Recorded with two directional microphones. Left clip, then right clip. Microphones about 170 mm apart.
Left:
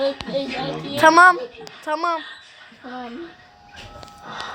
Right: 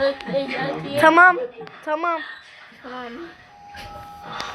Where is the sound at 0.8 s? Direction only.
5° left (ahead or behind).